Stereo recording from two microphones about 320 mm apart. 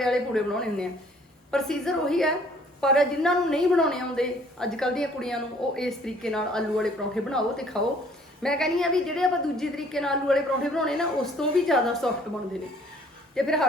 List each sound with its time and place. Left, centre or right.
0.0 s a woman's voice: centre
13.3 s a woman's voice: centre